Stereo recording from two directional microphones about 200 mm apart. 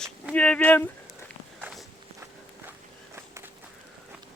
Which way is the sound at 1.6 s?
5° right (ahead or behind).